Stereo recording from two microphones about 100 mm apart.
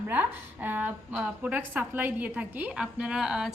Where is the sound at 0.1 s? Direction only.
20° right (ahead or behind).